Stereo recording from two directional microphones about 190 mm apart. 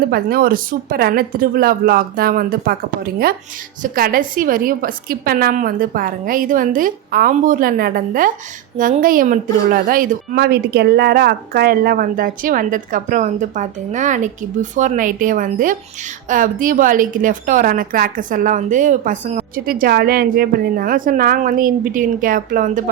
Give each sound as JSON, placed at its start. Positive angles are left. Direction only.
{"t": 0.1, "sound": "speech", "side_deg": -50}
{"t": 3.8, "sound": "speech", "side_deg": -50}